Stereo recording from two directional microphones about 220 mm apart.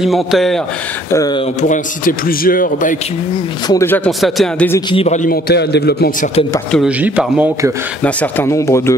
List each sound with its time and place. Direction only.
0.0 s a man's voice: centre (ahead or behind)
1.1 s speech: 15° left (ahead or behind)
1.6 s a man's voice: 35° left (ahead or behind)
3.6 s speech: 10° left (ahead or behind)
4.7 s a man's voice: 25° left (ahead or behind); by 6.3 s 45° left (ahead or behind)
6.7 s speech: 5° right (ahead or behind)
8.0 s speech: 10° left (ahead or behind)